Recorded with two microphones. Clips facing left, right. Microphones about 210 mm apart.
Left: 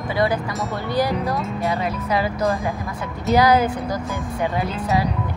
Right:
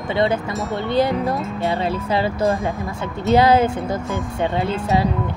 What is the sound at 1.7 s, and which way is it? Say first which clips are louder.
Speech: right 3 dB; 30° right (ahead or behind).